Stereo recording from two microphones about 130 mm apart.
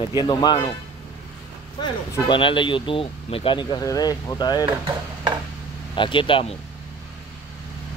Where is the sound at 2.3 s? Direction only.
40° left (ahead or behind).